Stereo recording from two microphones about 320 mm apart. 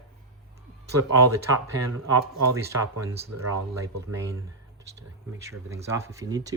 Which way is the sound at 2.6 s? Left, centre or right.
Centre.